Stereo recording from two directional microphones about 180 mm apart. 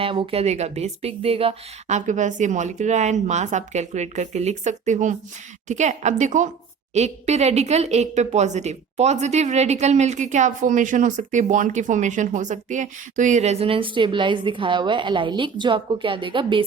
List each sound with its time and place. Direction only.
0.0 s a woman's voice: 30° right (ahead or behind)